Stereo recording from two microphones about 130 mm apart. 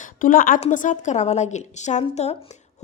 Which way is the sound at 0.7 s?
75° left (ahead or behind).